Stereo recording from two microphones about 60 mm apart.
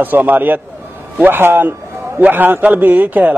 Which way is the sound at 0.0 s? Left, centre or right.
Right.